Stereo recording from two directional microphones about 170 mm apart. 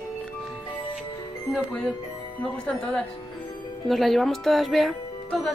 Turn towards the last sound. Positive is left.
turn(degrees=0)  # may be behind; listen again after turning